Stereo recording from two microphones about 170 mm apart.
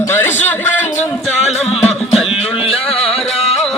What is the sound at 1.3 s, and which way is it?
Music, 40° left (ahead or behind).